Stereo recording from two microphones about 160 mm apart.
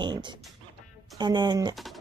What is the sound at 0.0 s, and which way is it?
Music, 30° right (ahead or behind).